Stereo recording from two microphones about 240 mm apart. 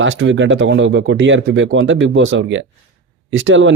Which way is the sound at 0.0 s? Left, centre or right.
Right.